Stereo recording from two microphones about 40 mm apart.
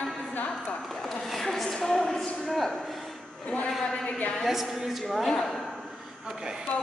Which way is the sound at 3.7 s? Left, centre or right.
Centre.